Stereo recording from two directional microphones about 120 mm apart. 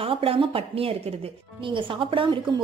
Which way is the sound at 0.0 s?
50° right (ahead or behind).